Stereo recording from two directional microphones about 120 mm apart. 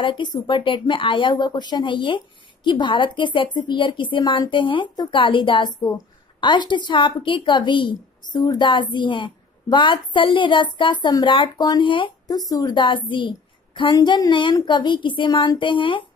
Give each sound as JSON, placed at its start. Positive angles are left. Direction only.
{"t": 0.0, "sound": "a woman's voice", "side_deg": 40}
{"t": 12.4, "sound": "a woman's voice", "side_deg": 30}